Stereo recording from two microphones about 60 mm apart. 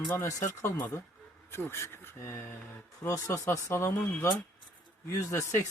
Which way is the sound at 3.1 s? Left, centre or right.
Left.